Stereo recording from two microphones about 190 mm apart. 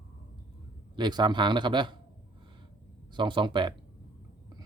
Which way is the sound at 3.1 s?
25° right (ahead or behind).